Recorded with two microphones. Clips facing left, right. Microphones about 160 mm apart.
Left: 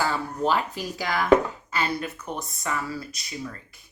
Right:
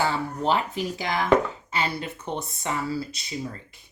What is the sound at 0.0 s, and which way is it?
Speech, 25° right (ahead or behind).